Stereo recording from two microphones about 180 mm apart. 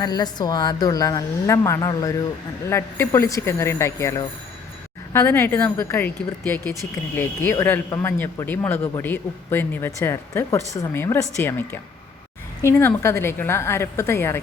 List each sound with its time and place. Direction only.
0.0 s a woman's voice: 20° left (ahead or behind)
7.2 s speech: 10° left (ahead or behind)